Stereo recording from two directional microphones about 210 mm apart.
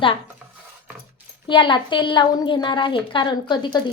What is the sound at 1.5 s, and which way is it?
A woman's voice, 20° left (ahead or behind).